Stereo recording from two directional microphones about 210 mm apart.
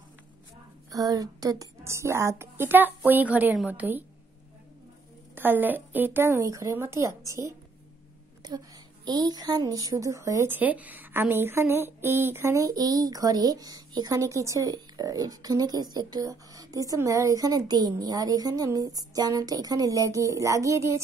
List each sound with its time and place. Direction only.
0.9 s a woman's voice: 20° right (ahead or behind)
5.3 s a woman's voice: 10° right (ahead or behind)